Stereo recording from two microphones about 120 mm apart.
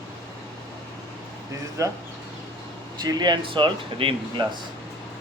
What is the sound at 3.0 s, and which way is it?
Speech, 35° right (ahead or behind).